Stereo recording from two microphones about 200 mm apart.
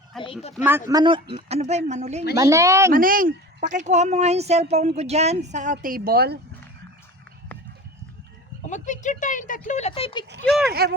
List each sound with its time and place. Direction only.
0.1 s speech: centre (ahead or behind)
0.9 s speech: 20° right (ahead or behind)
2.3 s speech: 15° right (ahead or behind)
2.9 s speech: 45° right (ahead or behind)
5.8 s speech: 45° right (ahead or behind)
8.6 s speech: 35° left (ahead or behind)
10.4 s speech: centre (ahead or behind)
10.7 s speech: 50° right (ahead or behind)